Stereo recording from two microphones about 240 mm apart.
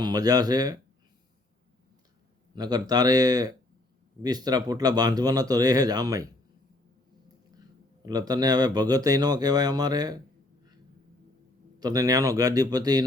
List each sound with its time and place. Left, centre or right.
0.0 s speech: centre
2.6 s speech: centre
8.0 s speech: centre
11.8 s speech: centre